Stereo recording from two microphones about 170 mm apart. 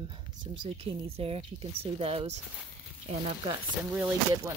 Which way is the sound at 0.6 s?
35° right (ahead or behind).